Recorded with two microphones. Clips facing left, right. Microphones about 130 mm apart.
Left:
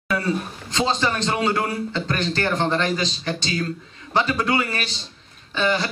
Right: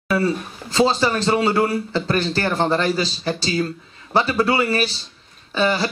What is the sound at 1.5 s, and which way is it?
Speech, 35° right (ahead or behind).